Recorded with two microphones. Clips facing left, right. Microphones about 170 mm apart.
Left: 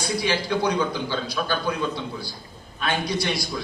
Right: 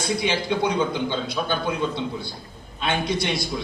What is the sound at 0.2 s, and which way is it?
A man's voice, 20° right (ahead or behind).